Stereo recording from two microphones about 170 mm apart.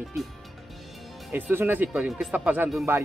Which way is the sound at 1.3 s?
10° right (ahead or behind).